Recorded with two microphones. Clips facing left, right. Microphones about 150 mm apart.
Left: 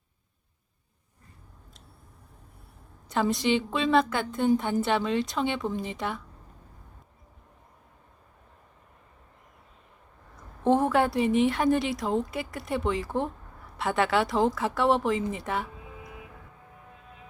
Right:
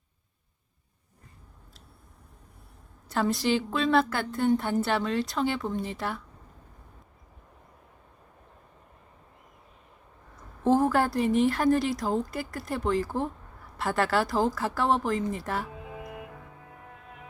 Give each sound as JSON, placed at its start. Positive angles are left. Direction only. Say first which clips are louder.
{"t": 3.1, "sound": "a woman's voice", "louder": "left 1 dB", "side_deg": 0}
{"t": 10.3, "sound": "a woman's voice", "louder": "even", "side_deg": 0}
{"t": 16.0, "sound": "music", "louder": "right 5 dB", "side_deg": -60}